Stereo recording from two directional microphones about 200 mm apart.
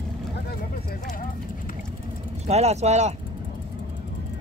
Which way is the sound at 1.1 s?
45° left (ahead or behind).